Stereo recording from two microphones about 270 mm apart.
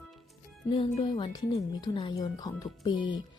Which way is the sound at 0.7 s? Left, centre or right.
Centre.